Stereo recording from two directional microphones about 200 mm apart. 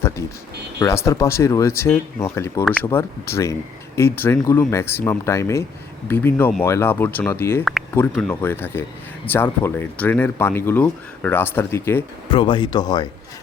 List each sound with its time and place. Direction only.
0.2 s speech: 15° left (ahead or behind)
7.6 s speech: centre (ahead or behind)
7.9 s speech: 10° left (ahead or behind)
12.3 s speech: 25° left (ahead or behind)